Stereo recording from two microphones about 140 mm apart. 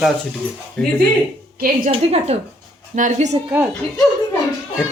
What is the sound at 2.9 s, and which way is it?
Speech, 60° right (ahead or behind).